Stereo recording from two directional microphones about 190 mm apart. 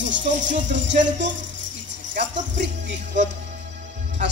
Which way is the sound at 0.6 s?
70° right (ahead or behind).